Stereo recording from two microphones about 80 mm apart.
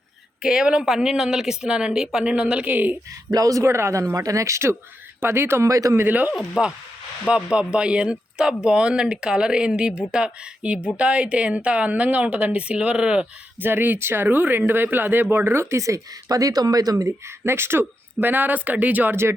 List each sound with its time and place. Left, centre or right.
0.4 s speech: centre
3.3 s speech: right
6.0 s speech: right
6.6 s speech: centre
13.6 s speech: right